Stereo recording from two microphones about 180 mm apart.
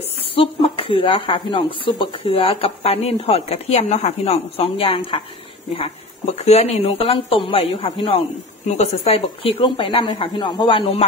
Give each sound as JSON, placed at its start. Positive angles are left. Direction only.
{"t": 0.3, "sound": "speech", "side_deg": 30}
{"t": 6.3, "sound": "speech", "side_deg": 35}